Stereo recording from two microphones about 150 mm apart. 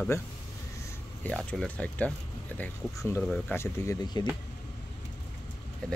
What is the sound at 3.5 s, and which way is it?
Speech, 20° left (ahead or behind).